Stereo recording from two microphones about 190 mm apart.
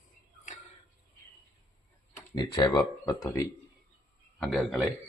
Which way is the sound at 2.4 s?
20° left (ahead or behind).